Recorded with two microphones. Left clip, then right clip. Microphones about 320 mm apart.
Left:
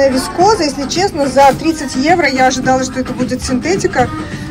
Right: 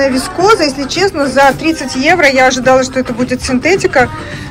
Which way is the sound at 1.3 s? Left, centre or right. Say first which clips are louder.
Left 1 dB; centre.